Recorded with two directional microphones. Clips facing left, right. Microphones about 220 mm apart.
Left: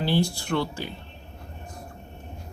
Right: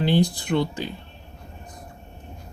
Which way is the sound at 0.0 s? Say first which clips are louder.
Right 4 dB; 20° right (ahead or behind).